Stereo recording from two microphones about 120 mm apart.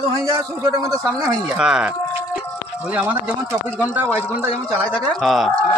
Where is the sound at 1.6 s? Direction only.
5° right (ahead or behind).